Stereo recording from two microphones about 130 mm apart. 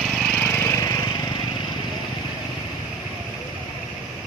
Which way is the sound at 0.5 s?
20° left (ahead or behind).